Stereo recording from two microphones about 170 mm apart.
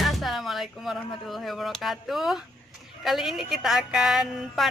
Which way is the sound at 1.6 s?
Centre (ahead or behind).